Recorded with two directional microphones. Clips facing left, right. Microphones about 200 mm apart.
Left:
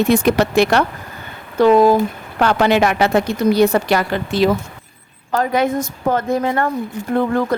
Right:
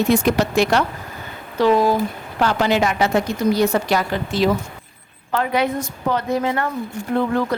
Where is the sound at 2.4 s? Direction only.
65° left (ahead or behind).